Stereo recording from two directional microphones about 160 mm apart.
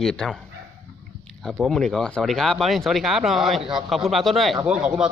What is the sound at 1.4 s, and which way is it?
Speech, 5° left (ahead or behind).